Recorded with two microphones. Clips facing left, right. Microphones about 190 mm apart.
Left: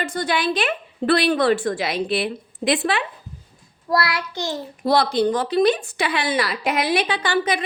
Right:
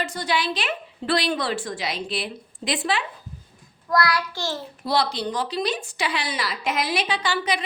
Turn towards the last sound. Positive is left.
turn(degrees=50)  # may be behind; listen again after turning